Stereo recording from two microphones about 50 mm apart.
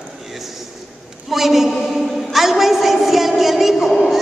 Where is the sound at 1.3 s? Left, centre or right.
Centre.